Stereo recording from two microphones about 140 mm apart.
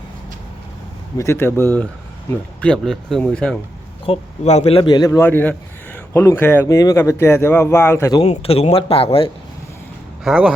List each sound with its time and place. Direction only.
1.2 s speech: 15° left (ahead or behind)
4.0 s speech: 45° left (ahead or behind)
4.8 s a man's voice: 30° left (ahead or behind)
5.2 s speech: 15° left (ahead or behind)
6.7 s speech: 25° left (ahead or behind)
8.2 s speech: 45° left (ahead or behind)
10.2 s speech: 5° right (ahead or behind)